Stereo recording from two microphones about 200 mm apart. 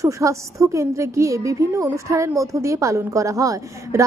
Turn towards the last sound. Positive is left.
turn(degrees=-15)  # may be behind; listen again after turning